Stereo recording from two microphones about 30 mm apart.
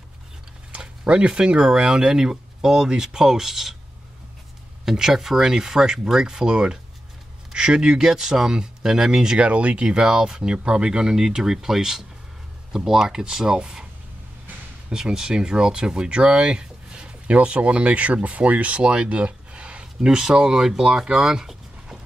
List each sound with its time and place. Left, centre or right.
1.0 s speech: right
1.9 s speech: right
4.8 s speech: centre
8.1 s speech: centre
9.4 s speech: right
9.8 s speech: right
14.9 s speech: right
17.3 s speech: right
18.8 s speech: right
19.0 s a sound: right
20.2 s speech: right